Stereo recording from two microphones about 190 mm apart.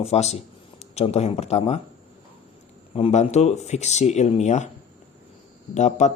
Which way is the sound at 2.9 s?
35° left (ahead or behind).